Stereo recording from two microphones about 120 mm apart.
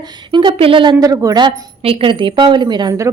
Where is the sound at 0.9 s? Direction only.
25° right (ahead or behind).